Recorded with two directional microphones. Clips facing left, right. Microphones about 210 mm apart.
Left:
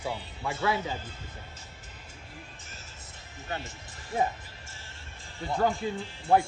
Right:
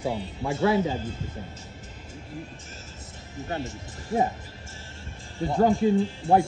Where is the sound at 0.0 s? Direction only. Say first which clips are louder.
Right 5 dB; 20° right (ahead or behind).